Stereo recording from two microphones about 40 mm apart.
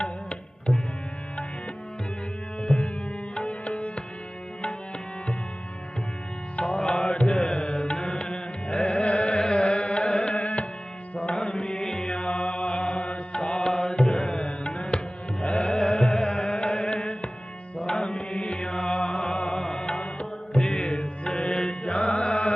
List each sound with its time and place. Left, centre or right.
0.0 s tabla: left
2.6 s music: left
6.6 s music: left
11.3 s music: left
13.4 s music: left